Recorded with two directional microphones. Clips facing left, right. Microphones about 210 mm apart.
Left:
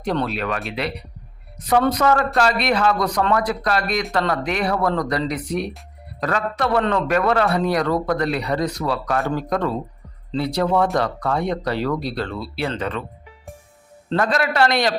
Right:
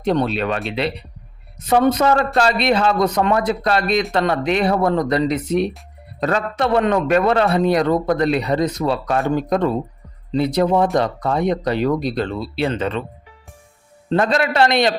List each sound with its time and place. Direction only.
0.0 s speech: 25° right (ahead or behind)
14.2 s speech: 25° right (ahead or behind)